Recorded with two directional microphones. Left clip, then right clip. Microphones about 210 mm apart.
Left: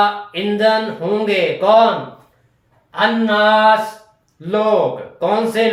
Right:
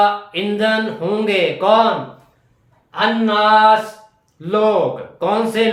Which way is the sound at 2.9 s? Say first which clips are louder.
Left 1 dB; 10° right (ahead or behind).